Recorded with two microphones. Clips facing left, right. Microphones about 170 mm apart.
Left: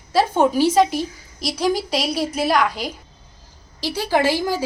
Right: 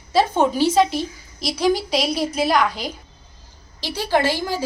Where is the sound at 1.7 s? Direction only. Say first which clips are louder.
Right 1 dB; 35° left (ahead or behind).